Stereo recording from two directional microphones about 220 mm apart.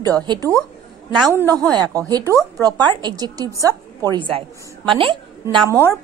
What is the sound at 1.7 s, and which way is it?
A woman's voice, 15° right (ahead or behind).